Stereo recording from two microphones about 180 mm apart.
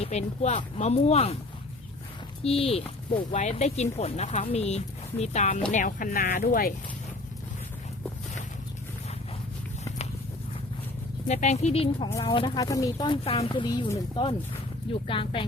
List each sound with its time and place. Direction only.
0.0 s speech: 40° left (ahead or behind)
2.4 s speech: 30° left (ahead or behind); by 6.7 s 55° left (ahead or behind)
11.3 s speech: 40° left (ahead or behind)
12.5 s speech: 20° left (ahead or behind)